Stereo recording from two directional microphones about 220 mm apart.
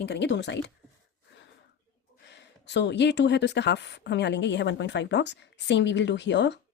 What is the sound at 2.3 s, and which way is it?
A woman's voice, 50° left (ahead or behind).